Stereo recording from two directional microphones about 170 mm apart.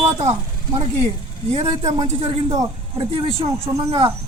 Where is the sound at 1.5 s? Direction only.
35° right (ahead or behind).